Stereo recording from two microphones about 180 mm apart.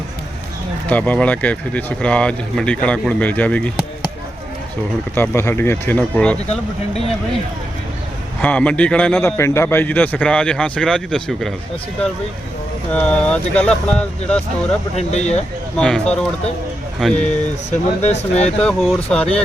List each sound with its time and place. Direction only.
0.9 s a man's voice: 10° left (ahead or behind)
5.1 s a man's voice: 10° left (ahead or behind)
8.4 s a man's voice: 5° left (ahead or behind)
12.9 s a man's voice: 5° left (ahead or behind)
14.9 s speech: 40° left (ahead or behind)
15.8 s speech: 5° left (ahead or behind)
17.7 s speech: 40° left (ahead or behind)
18.6 s speech: centre (ahead or behind)